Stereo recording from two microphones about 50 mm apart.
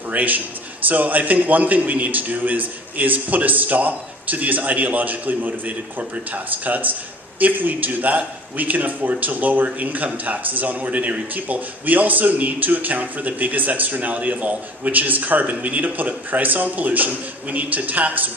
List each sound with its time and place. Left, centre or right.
0.1 s a man's voice: right